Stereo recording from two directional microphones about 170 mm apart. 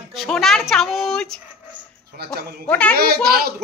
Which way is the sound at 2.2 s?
65° right (ahead or behind).